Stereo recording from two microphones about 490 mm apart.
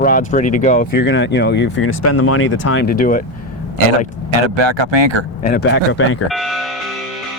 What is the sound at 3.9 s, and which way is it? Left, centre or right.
Speech, right.